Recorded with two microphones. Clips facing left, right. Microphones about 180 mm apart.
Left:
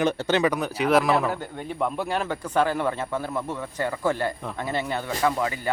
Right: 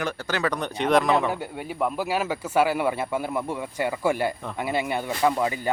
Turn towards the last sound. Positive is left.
turn(degrees=-20)  # may be behind; listen again after turning